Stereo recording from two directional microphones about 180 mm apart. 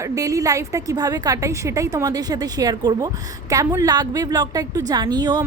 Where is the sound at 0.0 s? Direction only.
20° right (ahead or behind).